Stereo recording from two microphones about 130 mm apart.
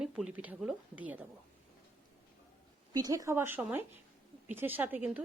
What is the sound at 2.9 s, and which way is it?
A woman's voice, 25° right (ahead or behind).